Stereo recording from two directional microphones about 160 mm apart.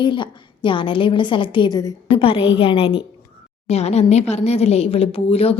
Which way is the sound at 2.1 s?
35° left (ahead or behind).